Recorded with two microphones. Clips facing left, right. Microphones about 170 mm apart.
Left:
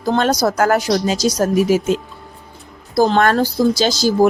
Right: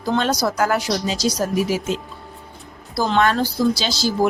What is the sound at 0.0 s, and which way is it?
Speech, 45° left (ahead or behind).